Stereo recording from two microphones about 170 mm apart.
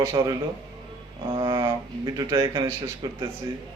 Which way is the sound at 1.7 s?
25° right (ahead or behind).